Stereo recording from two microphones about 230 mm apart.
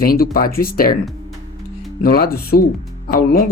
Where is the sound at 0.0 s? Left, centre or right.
Left.